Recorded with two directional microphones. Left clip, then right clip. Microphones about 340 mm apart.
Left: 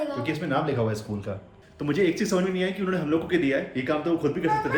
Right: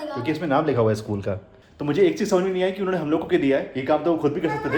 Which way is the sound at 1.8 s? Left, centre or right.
Centre.